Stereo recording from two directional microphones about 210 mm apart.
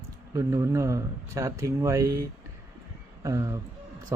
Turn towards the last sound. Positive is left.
turn(degrees=-15)  # may be behind; listen again after turning